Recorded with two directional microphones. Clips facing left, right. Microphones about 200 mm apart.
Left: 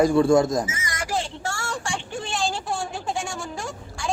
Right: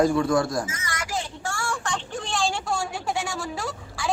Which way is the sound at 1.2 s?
25° left (ahead or behind).